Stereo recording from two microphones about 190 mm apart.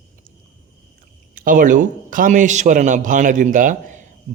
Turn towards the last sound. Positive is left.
turn(degrees=-40)  # may be behind; listen again after turning